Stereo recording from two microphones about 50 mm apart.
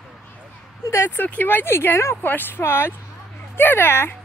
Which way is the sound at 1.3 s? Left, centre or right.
Left.